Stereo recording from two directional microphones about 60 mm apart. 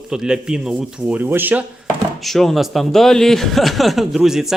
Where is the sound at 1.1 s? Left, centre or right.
Right.